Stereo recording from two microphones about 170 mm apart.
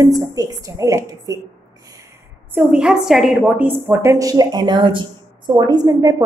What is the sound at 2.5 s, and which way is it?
A woman's voice, 5° right (ahead or behind).